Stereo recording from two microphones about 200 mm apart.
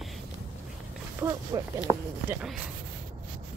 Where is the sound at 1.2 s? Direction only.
15° right (ahead or behind).